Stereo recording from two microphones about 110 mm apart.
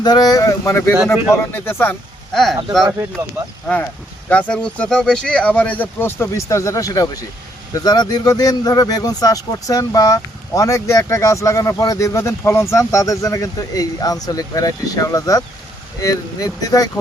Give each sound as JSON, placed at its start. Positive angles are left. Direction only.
{"t": 0.0, "sound": "speech", "side_deg": 35}
{"t": 2.3, "sound": "speech", "side_deg": 5}
{"t": 4.3, "sound": "speech", "side_deg": 15}